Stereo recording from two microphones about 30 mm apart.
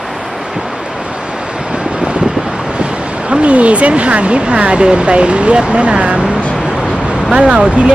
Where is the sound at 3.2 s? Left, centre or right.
Right.